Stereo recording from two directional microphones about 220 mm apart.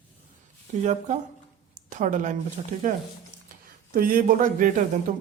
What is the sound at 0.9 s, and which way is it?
A man's voice, 35° right (ahead or behind).